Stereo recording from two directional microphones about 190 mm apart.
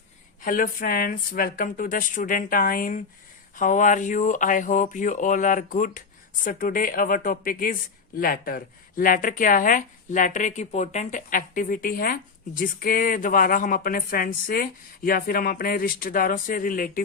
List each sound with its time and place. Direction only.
0.4 s speech: 45° left (ahead or behind)